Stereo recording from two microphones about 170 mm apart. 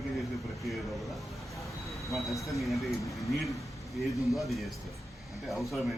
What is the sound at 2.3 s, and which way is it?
Speech, 20° left (ahead or behind).